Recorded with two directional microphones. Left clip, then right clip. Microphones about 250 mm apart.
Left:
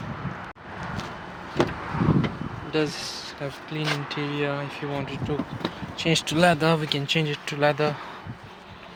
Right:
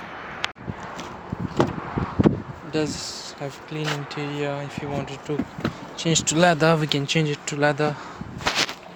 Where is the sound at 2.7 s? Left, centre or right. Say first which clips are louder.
Even; centre; by 7.0 s right.